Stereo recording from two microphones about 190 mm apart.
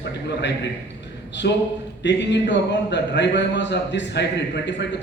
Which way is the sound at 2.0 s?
65° left (ahead or behind).